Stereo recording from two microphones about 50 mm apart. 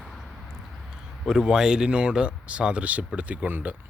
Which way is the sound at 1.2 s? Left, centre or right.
Centre.